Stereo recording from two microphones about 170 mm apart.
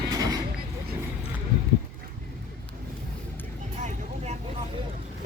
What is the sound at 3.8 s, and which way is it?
Vehicle, 45° right (ahead or behind).